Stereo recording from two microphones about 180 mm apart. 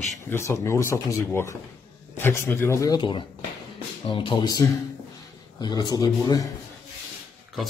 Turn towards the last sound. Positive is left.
turn(degrees=0)  # may be behind; listen again after turning